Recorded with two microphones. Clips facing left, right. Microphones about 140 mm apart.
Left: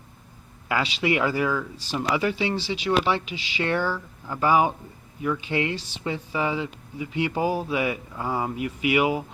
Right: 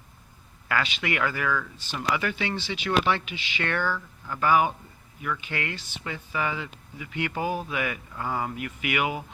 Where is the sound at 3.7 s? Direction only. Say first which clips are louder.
Left 3 dB; 15° left (ahead or behind).